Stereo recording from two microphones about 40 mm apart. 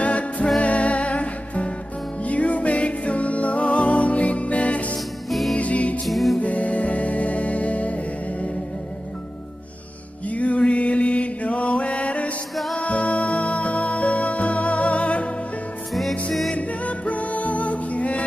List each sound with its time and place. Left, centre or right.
0.0 s music: left
4.9 s music: centre
5.6 s music: left
6.0 s music: centre
6.4 s music: left
10.2 s mantra: left
12.7 s music: left
15.9 s music: centre
16.5 s music: left